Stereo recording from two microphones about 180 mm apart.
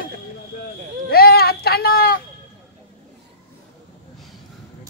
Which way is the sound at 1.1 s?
60° left (ahead or behind).